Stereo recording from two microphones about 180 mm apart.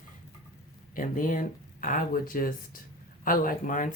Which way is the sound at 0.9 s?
50° left (ahead or behind).